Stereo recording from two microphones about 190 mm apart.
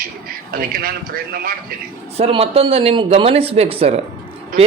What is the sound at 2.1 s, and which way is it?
Speech, 30° right (ahead or behind).